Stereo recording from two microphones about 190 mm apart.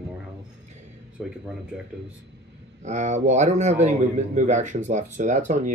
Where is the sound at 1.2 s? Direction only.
Centre (ahead or behind).